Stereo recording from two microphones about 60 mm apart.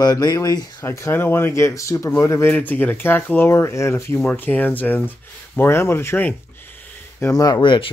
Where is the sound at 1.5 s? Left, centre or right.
Left.